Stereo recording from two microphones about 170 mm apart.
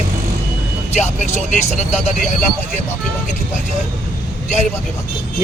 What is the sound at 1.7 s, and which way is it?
Speech, 40° left (ahead or behind).